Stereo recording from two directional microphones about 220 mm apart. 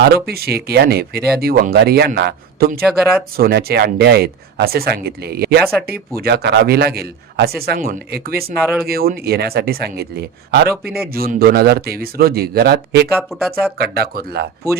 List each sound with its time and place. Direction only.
0.0 s speech: 45° right (ahead or behind)
2.8 s speech: centre (ahead or behind)
3.3 s speech: 45° right (ahead or behind)
13.1 s speech: centre (ahead or behind)
13.7 s speech: 45° right (ahead or behind)